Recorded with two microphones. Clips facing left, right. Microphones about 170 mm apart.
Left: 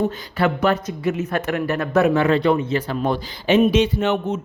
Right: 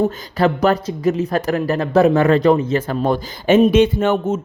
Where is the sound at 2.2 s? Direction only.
45° right (ahead or behind).